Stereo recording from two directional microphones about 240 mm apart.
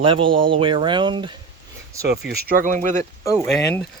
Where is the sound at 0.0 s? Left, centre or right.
Right.